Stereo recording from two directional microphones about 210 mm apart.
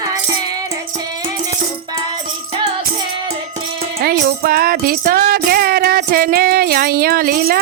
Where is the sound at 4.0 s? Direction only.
45° right (ahead or behind).